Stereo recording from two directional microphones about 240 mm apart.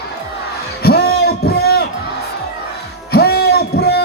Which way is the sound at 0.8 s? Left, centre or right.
Left.